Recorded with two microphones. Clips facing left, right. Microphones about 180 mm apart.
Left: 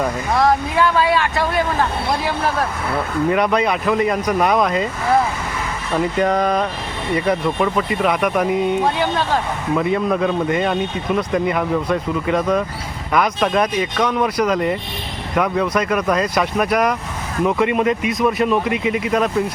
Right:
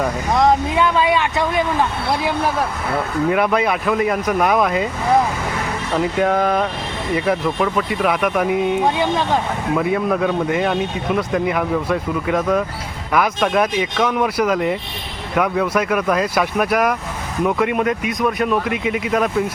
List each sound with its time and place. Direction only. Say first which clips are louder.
0.3 s speech: right 1 dB; 20° right (ahead or behind)
6.1 s speech: even; 5° right (ahead or behind)
9.0 s speech: right 1 dB; 20° right (ahead or behind)
9.7 s speech: left 1 dB; 5° right (ahead or behind)